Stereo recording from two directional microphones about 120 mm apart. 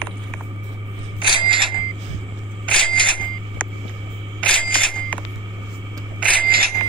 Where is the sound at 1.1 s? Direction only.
45° right (ahead or behind).